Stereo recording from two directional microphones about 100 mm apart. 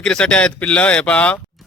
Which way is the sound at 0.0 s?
10° left (ahead or behind).